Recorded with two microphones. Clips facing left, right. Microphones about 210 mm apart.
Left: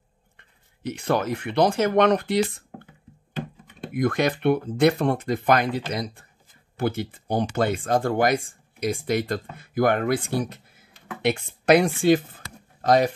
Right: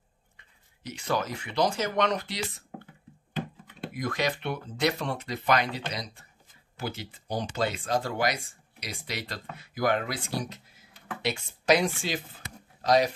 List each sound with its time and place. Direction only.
0.4 s speech: 55° left (ahead or behind)
3.9 s speech: 55° left (ahead or behind)